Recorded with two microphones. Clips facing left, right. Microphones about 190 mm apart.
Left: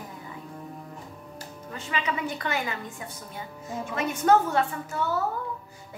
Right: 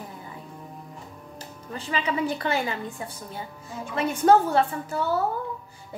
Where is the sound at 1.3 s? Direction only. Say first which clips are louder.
Right 3 dB; 30° right (ahead or behind).